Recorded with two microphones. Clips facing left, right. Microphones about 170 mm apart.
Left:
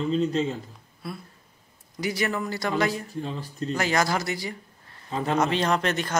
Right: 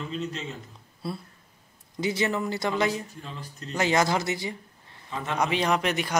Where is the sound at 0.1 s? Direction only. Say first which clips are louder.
Left 9 dB; 35° left (ahead or behind).